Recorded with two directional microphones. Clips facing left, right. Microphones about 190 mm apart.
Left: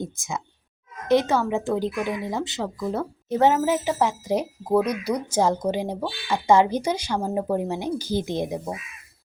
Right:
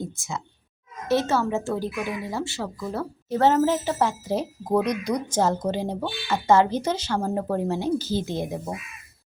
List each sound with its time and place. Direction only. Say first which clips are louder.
0.0 s speech: left 1 dB; 20° left (ahead or behind)